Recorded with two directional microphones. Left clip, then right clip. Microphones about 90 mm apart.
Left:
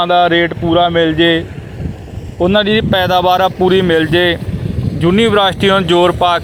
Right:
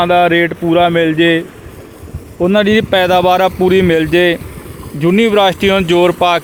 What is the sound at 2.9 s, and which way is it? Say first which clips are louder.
Speech: right 1 dB; 40° right (ahead or behind).